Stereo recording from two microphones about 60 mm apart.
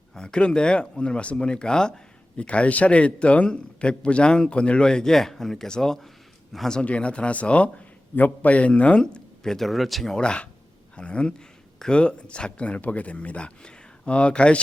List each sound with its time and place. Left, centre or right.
0.1 s a man's voice: centre
6.7 s a man's voice: centre
10.2 s a man's voice: centre